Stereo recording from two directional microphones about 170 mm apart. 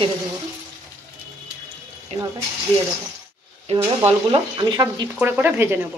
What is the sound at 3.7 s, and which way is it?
Speech, 35° right (ahead or behind).